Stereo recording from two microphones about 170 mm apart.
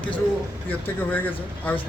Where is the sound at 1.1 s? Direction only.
10° left (ahead or behind).